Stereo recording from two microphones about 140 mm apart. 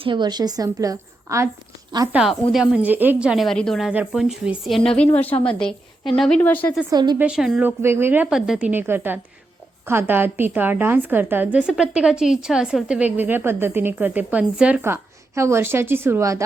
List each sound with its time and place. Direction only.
0.0 s a woman's voice: 35° right (ahead or behind)
2.1 s a woman's voice: centre (ahead or behind)
4.9 s a woman's voice: 10° left (ahead or behind)
6.4 s a woman's voice: 10° left (ahead or behind)
6.9 s a woman's voice: 30° right (ahead or behind)
7.2 s a woman's voice: 5° right (ahead or behind)
7.8 s a woman's voice: 15° right (ahead or behind)